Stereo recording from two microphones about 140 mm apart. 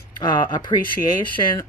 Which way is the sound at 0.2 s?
30° left (ahead or behind).